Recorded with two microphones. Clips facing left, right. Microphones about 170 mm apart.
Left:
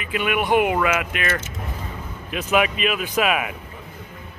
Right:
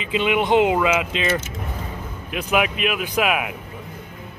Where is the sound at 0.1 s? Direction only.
20° right (ahead or behind).